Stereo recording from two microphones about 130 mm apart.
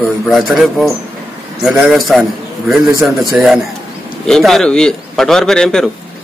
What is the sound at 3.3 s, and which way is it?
Speech, 10° right (ahead or behind).